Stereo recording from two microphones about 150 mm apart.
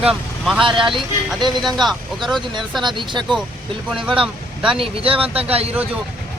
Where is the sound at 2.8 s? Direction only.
30° right (ahead or behind).